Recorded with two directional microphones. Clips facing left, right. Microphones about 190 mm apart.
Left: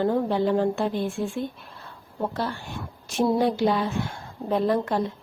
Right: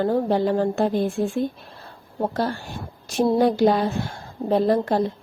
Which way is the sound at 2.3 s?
40° right (ahead or behind).